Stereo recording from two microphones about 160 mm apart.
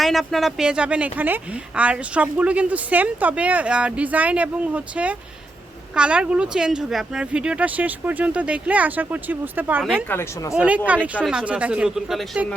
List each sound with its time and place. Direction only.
0.0 s speech: centre (ahead or behind)
10.1 s speech: 15° left (ahead or behind)
10.5 s speech: 10° right (ahead or behind)